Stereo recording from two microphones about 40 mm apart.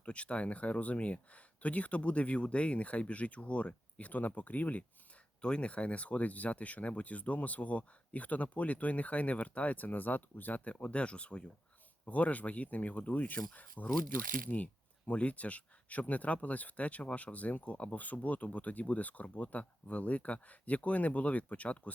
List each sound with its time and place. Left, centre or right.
0.0 s speech: left
5.4 s speech: left
10.6 s speech: left